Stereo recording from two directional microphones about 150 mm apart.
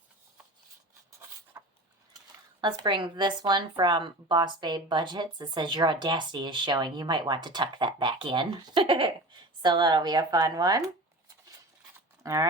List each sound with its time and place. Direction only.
1.5 s a sound: 15° right (ahead or behind)
2.6 s a woman's voice: 30° right (ahead or behind)
12.2 s speech: 20° right (ahead or behind)